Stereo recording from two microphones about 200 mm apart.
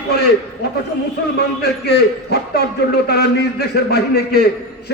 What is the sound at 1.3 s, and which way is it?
A man's voice, 55° left (ahead or behind).